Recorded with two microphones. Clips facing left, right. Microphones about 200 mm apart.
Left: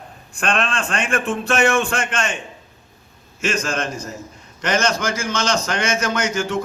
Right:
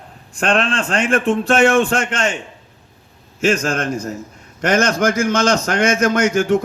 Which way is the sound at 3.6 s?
55° right (ahead or behind).